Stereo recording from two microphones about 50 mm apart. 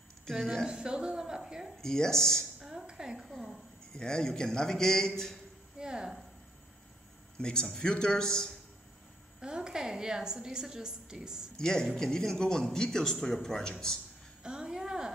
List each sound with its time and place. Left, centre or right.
0.3 s a woman's voice: centre
0.7 s a woman's voice: centre
1.8 s a man's voice: centre
2.6 s a sound: centre
3.3 s a man's voice: centre
5.8 s speech: centre
7.3 s a man's voice: centre
9.4 s a woman's voice: centre
11.5 s a man's voice: centre
14.4 s a sound: centre